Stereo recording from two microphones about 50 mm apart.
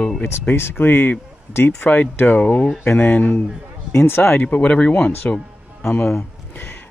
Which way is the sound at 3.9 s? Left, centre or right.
Left.